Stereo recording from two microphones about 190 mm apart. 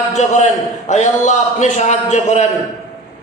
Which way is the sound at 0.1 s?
35° left (ahead or behind).